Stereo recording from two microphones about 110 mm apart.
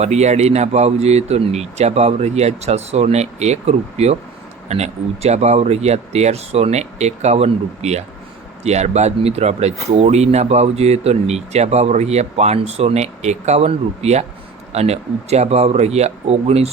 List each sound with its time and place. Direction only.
0.0 s speech: 90° right; by 16.6 s 70° right (ahead or behind)